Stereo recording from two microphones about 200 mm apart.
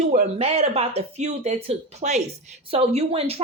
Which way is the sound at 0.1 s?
35° right (ahead or behind).